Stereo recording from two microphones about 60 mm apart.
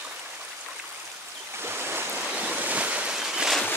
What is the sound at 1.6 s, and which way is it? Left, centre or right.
Waves, right.